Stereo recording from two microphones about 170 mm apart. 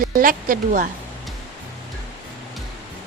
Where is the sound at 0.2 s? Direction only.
55° right (ahead or behind).